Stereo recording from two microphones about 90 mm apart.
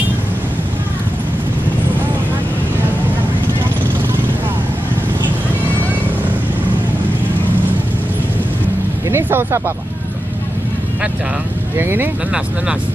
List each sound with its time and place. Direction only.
9.1 s vehicle: 25° right (ahead or behind)
11.7 s speech: 25° right (ahead or behind)